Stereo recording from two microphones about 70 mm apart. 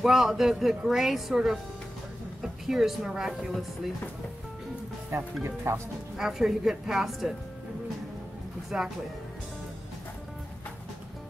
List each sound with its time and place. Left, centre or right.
0.0 s speech: centre
2.7 s speech: centre
5.7 s speech: right
6.1 s speech: centre
8.6 s speech: centre